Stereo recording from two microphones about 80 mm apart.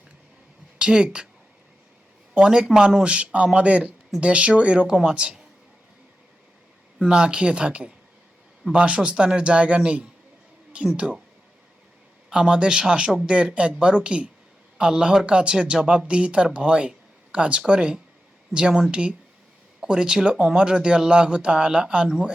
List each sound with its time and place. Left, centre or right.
0.8 s a woman's voice: centre
2.3 s speech: centre
7.0 s speech: centre
12.3 s speech: centre